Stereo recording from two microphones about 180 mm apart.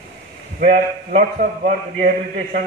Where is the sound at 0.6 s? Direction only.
60° right (ahead or behind).